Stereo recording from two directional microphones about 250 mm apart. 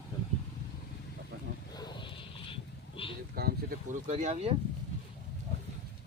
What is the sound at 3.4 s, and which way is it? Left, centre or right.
Speech, right.